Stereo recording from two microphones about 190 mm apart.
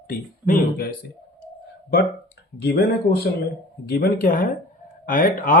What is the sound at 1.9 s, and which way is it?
Speech, 60° left (ahead or behind).